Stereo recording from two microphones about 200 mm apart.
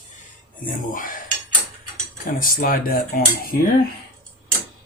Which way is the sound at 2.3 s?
45° left (ahead or behind).